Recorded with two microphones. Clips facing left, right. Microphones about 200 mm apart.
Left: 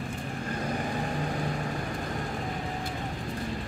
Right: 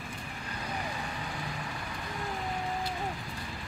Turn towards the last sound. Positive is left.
turn(degrees=45)  # may be behind; listen again after turning